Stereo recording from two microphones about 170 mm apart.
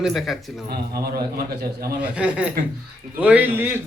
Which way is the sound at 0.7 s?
65° right (ahead or behind).